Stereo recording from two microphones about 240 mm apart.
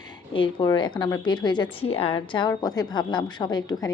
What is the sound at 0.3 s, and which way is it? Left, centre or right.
A woman's voice, centre.